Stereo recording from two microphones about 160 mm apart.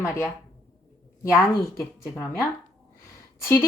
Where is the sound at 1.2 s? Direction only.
15° left (ahead or behind).